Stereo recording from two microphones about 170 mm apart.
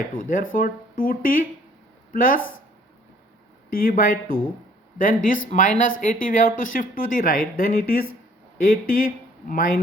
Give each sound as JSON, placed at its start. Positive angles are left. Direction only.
{"t": 0.1, "sound": "speech", "side_deg": 55}
{"t": 3.7, "sound": "speech", "side_deg": 55}